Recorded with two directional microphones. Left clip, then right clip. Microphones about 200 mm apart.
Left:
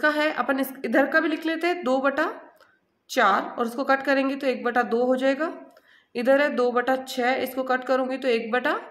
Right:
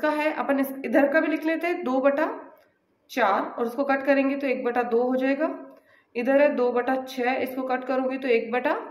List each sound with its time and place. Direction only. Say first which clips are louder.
0.0 s a woman's voice: left 2 dB; 25° left (ahead or behind)